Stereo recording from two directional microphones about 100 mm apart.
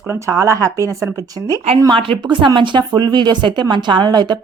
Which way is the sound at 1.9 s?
55° right (ahead or behind).